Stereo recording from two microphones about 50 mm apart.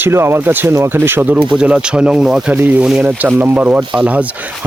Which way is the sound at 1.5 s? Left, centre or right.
Centre.